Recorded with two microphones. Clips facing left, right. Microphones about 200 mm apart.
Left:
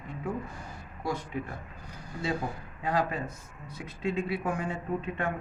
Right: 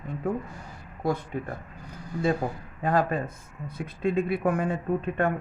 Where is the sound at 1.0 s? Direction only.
55° right (ahead or behind).